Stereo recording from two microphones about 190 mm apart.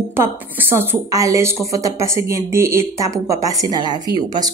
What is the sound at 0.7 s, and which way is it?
A woman's voice, 10° right (ahead or behind).